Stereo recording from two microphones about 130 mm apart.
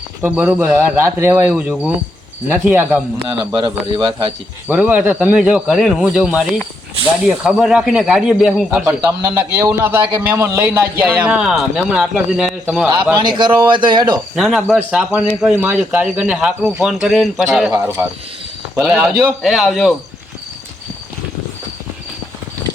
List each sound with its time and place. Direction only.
0.2 s a man's voice: 10° right (ahead or behind)
3.5 s a man's voice: 35° right (ahead or behind)
4.7 s a man's voice: 10° right (ahead or behind)
9.0 s a man's voice: 20° right (ahead or behind)
13.1 s a man's voice: 35° right (ahead or behind)
14.3 s speech: centre (ahead or behind)
17.7 s a man's voice: 15° right (ahead or behind)
19.4 s speech: centre (ahead or behind)